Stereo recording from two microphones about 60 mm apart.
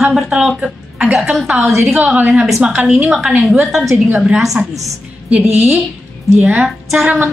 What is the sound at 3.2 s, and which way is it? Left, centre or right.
A woman's voice, centre.